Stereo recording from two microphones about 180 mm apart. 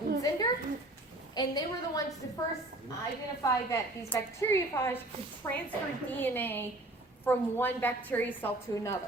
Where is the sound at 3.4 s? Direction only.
15° left (ahead or behind).